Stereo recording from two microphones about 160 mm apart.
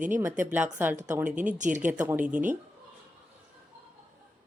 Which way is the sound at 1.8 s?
10° right (ahead or behind).